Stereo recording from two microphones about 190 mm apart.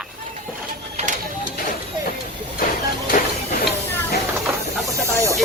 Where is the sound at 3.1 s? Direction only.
45° left (ahead or behind).